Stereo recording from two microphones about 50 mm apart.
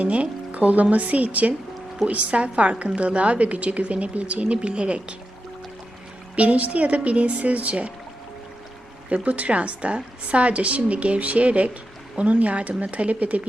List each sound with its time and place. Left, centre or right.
0.0 s a woman's voice: right
6.3 s a woman's voice: right
9.0 s a woman's voice: right